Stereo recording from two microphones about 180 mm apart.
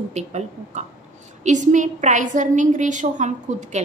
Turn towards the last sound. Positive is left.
turn(degrees=-40)  # may be behind; listen again after turning